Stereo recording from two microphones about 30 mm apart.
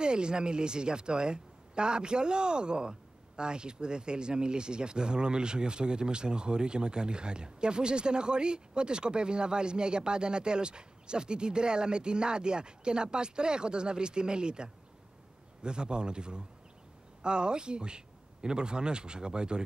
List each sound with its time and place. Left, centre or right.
0.0 s a man's voice: right